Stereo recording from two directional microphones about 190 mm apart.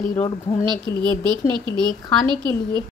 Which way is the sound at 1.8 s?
25° right (ahead or behind).